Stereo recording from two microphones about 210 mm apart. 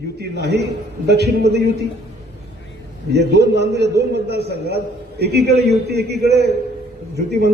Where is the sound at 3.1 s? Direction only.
50° right (ahead or behind).